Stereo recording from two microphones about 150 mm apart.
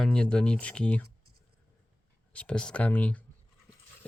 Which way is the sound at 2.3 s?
5° left (ahead or behind).